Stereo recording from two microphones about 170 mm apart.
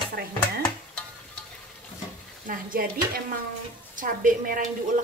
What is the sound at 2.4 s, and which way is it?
Speech, 55° right (ahead or behind).